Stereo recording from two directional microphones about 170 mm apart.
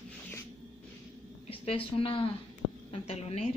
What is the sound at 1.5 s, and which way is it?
A woman's voice, 35° left (ahead or behind).